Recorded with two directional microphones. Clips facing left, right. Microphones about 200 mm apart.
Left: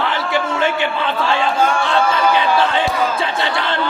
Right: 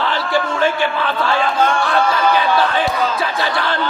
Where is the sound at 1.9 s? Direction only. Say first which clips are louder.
Even; 25° left (ahead or behind).